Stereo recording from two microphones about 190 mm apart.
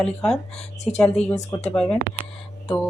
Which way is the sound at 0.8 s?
35° left (ahead or behind).